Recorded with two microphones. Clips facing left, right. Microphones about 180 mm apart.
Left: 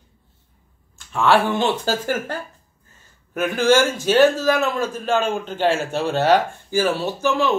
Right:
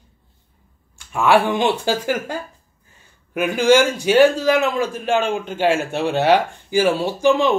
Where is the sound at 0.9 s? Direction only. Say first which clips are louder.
Right 1 dB; 15° right (ahead or behind).